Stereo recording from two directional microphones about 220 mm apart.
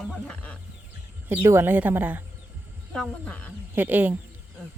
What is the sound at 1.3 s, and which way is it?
Speech, 10° right (ahead or behind).